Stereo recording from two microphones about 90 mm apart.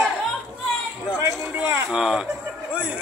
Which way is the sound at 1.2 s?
30° right (ahead or behind).